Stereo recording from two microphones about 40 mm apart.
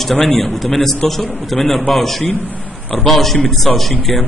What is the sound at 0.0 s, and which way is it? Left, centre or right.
A man's voice, centre.